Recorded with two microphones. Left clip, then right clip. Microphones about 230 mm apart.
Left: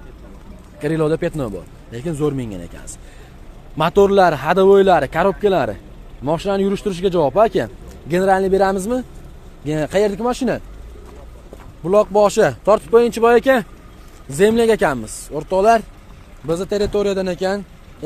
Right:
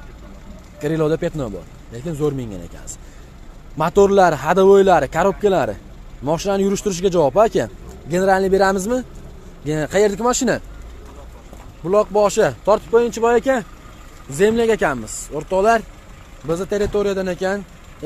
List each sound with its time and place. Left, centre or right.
0.7 s speech: centre
3.7 s speech: centre
11.8 s speech: centre